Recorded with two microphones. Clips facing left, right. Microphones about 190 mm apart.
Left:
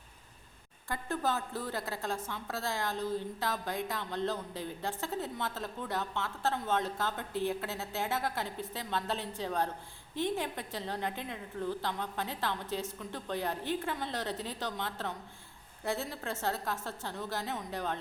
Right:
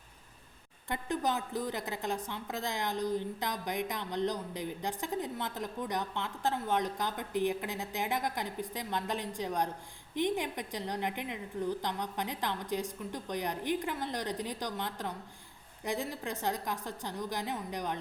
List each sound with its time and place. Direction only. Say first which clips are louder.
0.9 s a woman's voice: right 1 dB; 15° right (ahead or behind)